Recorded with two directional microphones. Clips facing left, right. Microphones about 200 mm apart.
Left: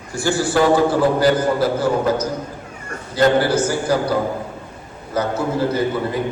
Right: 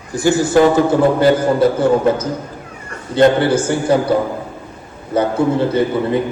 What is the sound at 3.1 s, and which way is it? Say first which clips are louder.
A man's voice: right 4 dB; 25° right (ahead or behind).